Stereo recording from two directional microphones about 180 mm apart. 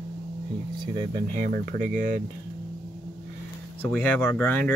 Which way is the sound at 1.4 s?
50° right (ahead or behind).